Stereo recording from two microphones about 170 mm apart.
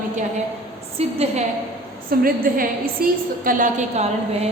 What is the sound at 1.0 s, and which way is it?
Speech, 35° right (ahead or behind).